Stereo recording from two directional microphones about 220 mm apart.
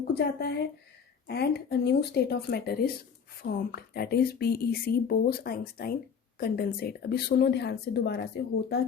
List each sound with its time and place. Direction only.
0.1 s speech: 50° left (ahead or behind)